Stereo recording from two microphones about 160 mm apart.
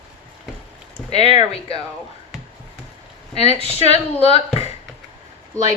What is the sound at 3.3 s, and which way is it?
Speech, 40° left (ahead or behind).